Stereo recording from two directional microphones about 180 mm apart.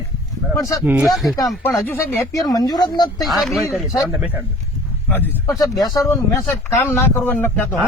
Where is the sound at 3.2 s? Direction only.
Centre (ahead or behind).